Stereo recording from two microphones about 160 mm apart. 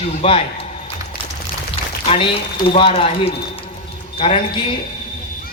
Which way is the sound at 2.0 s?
35° left (ahead or behind).